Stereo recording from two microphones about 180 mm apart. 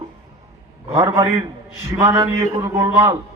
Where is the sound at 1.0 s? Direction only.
15° right (ahead or behind).